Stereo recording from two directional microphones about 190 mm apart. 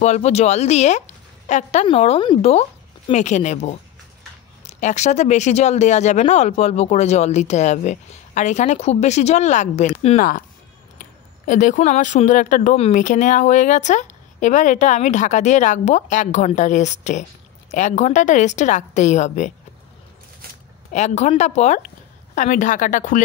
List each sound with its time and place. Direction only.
0.0 s speech: 35° left (ahead or behind)
11.4 s speech: 40° left (ahead or behind)
20.9 s a woman's voice: 35° left (ahead or behind)